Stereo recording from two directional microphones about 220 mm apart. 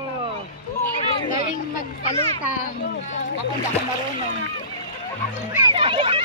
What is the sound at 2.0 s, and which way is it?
Speech, 30° left (ahead or behind).